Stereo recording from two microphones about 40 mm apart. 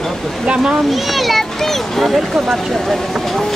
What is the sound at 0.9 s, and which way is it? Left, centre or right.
A child's voice, centre.